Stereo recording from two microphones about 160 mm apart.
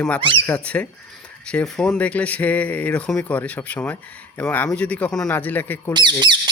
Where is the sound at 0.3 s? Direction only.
10° left (ahead or behind).